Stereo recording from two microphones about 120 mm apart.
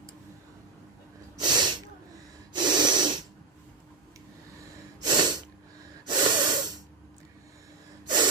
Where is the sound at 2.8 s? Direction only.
40° right (ahead or behind).